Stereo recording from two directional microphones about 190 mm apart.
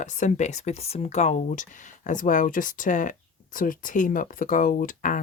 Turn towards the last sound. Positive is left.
turn(degrees=45)  # may be behind; listen again after turning